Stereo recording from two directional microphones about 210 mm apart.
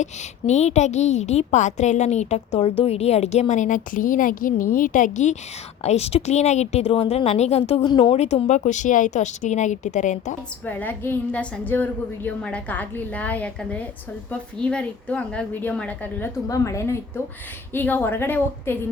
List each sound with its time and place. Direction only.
0.0 s a woman's voice: 35° left (ahead or behind)
10.7 s a woman's voice: 10° left (ahead or behind)